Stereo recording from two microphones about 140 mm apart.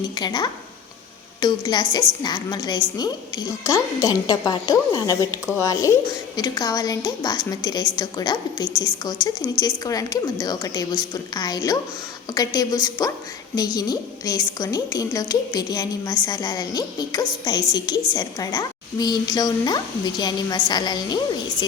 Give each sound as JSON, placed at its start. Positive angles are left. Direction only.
{"t": 0.2, "sound": "a woman's voice", "side_deg": 30}